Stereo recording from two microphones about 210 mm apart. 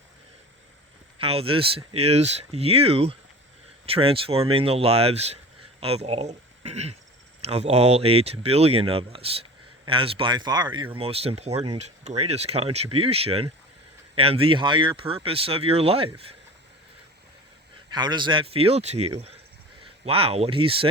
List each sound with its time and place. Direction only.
1.2 s speech: 25° right (ahead or behind)
17.9 s speech: 20° right (ahead or behind)